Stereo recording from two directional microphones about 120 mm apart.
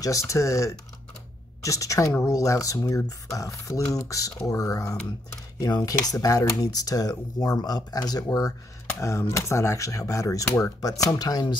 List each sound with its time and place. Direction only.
0.0 s speech: 25° left (ahead or behind)